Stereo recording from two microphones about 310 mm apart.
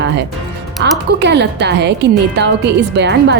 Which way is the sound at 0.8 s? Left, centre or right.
Right.